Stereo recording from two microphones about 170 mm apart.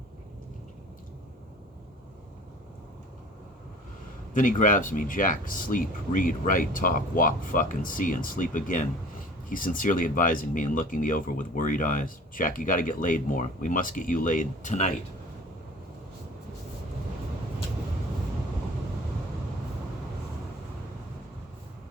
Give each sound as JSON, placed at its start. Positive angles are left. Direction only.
{"t": 4.4, "sound": "speech", "side_deg": 50}